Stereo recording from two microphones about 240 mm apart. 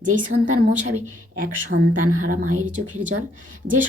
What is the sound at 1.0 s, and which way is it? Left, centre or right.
Speech, right.